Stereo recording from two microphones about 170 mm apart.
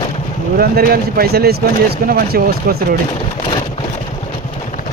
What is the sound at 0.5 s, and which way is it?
Speech, 60° right (ahead or behind).